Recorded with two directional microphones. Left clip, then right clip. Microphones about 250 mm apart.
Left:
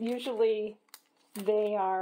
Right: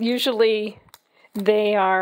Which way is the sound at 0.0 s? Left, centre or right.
Right.